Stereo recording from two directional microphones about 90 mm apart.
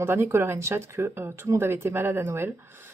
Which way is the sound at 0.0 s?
30° right (ahead or behind).